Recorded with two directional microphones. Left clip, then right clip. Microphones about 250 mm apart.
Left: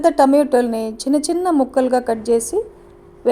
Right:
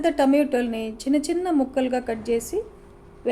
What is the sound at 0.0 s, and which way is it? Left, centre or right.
A woman's voice, left.